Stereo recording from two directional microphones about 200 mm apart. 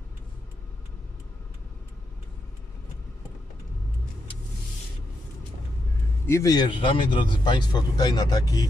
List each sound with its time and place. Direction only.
6.2 s speech: 15° left (ahead or behind)